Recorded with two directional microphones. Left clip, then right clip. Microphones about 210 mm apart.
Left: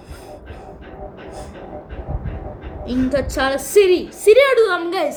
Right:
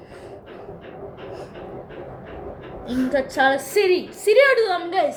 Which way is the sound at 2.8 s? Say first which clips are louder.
Left 2 dB; 50° left (ahead or behind).